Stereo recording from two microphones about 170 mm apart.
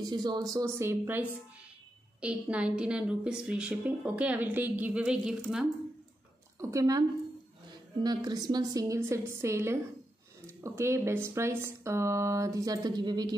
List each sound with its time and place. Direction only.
0.0 s a woman's voice: 25° right (ahead or behind); by 5.7 s 5° right (ahead or behind)
6.6 s a woman's voice: 20° right (ahead or behind)